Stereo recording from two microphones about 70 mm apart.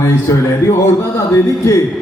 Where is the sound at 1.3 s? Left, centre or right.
Left.